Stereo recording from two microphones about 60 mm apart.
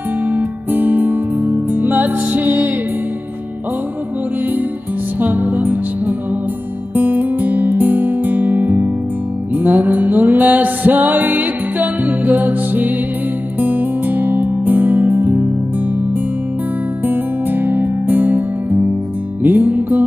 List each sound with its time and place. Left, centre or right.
0.3 s music: right
5.2 s music: right
17.0 s music: right
19.4 s music: right